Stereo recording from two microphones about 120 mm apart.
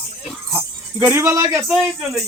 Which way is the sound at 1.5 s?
Centre (ahead or behind).